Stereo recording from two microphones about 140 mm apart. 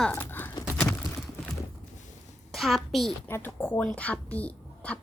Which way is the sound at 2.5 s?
Centre (ahead or behind).